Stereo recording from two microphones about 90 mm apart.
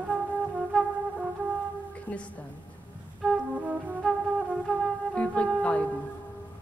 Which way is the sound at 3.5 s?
15° right (ahead or behind).